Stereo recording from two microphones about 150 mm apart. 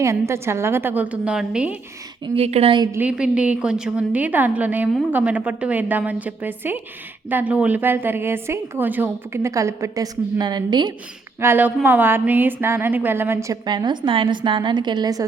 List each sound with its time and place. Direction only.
0.0 s a woman's voice: 20° right (ahead or behind)
2.2 s a woman's voice: 40° right (ahead or behind)
2.9 s a woman's voice: 10° right (ahead or behind); by 10.9 s 30° right (ahead or behind)
11.3 s a woman's voice: 15° right (ahead or behind)
13.7 s a woman's voice: 30° right (ahead or behind)